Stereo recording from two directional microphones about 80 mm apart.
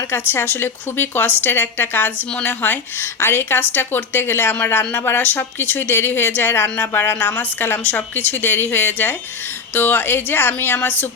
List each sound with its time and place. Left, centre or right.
0.1 s speech: left